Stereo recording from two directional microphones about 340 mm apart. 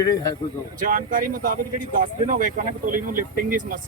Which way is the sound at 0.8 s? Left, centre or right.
Right.